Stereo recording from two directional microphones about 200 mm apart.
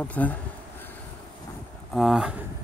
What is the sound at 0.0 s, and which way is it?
Speech, 10° left (ahead or behind).